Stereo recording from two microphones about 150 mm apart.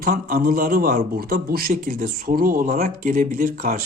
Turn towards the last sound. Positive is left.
turn(degrees=-65)  # may be behind; listen again after turning